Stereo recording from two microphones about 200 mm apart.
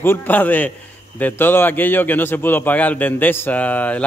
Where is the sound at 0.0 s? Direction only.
10° left (ahead or behind).